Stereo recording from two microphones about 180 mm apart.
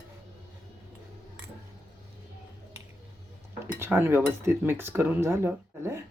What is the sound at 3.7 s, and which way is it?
Cutlery, 10° right (ahead or behind).